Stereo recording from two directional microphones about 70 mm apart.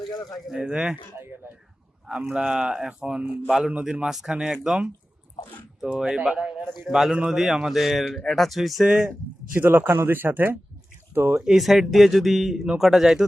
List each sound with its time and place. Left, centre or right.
0.4 s speech: centre
2.0 s speech: centre
5.9 s a man's voice: centre
9.0 s speech: right
11.4 s a man's voice: centre